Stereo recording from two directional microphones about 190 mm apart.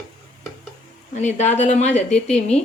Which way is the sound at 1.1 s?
35° left (ahead or behind).